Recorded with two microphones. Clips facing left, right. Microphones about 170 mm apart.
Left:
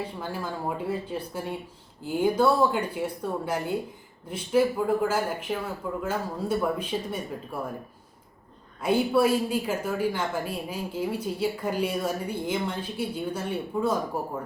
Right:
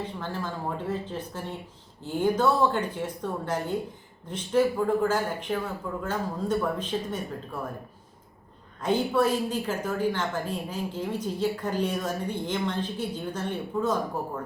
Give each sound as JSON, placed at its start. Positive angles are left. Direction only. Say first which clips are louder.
{"t": 0.0, "sound": "a woman's voice", "louder": "even", "side_deg": 10}
{"t": 8.8, "sound": "a woman's voice", "louder": "left 2 dB", "side_deg": 10}